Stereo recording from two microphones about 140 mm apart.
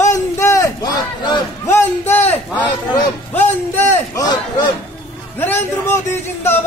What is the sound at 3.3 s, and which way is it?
Speech, 15° left (ahead or behind).